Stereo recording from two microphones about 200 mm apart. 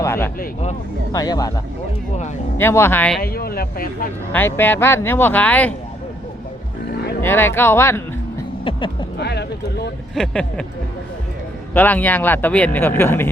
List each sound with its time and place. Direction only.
0.0 s vehicle: 15° left (ahead or behind)
1.1 s a man's voice: 20° left (ahead or behind)
3.2 s speech: 50° left (ahead or behind)
4.3 s a man's voice: 10° left (ahead or behind)
7.2 s speech: 10° left (ahead or behind)
8.6 s speech: 25° left (ahead or behind)
9.1 s speech: 55° left (ahead or behind)
10.2 s speech: 5° left (ahead or behind)
11.7 s a man's voice: 10° left (ahead or behind)